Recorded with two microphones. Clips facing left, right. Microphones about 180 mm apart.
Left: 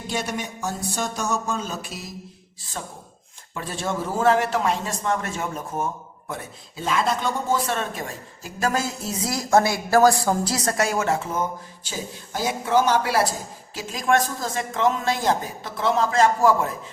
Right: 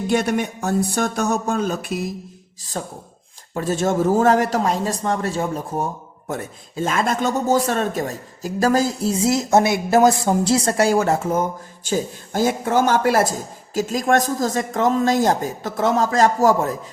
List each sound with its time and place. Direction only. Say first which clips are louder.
0.1 s speech: right 8 dB; 55° right (ahead or behind)
2.8 s speech: right 6 dB; 40° right (ahead or behind)
6.2 s speech: right 6 dB; 45° right (ahead or behind)